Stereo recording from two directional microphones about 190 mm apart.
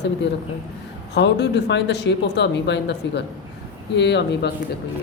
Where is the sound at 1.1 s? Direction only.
65° left (ahead or behind).